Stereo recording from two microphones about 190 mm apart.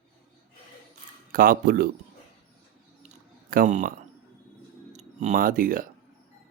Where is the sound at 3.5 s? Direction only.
45° right (ahead or behind).